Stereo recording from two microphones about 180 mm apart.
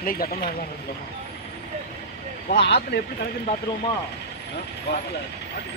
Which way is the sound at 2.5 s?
60° left (ahead or behind).